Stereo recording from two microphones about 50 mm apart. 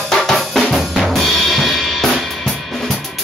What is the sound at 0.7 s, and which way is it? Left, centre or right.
Drum kit, centre.